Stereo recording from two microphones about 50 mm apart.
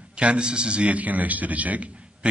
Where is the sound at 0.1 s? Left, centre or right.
Right.